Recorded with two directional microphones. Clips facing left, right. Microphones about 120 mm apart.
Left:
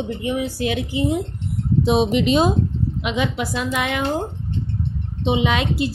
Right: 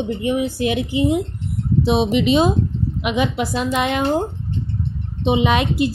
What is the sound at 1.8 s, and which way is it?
Speech, centre (ahead or behind).